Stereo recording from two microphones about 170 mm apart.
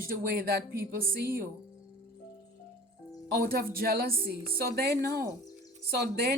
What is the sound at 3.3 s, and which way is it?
Speech, 65° right (ahead or behind).